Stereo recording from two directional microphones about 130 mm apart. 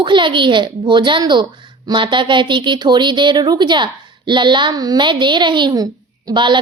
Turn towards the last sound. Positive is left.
turn(degrees=-35)  # may be behind; listen again after turning